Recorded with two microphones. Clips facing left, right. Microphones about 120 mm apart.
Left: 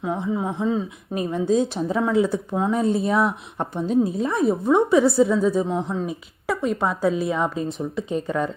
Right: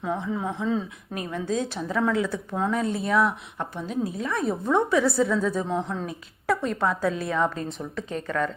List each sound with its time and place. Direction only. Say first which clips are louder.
0.0 s speech: left 3 dB; 15° left (ahead or behind)
1.1 s speech: left 7 dB; 25° left (ahead or behind)